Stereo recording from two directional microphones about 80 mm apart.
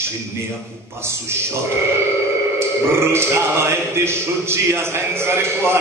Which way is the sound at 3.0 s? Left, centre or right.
Right.